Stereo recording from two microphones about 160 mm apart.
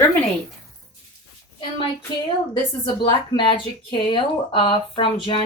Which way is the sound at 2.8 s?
30° left (ahead or behind).